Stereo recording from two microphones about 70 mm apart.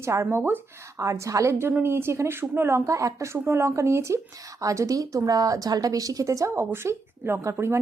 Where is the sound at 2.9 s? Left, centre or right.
Right.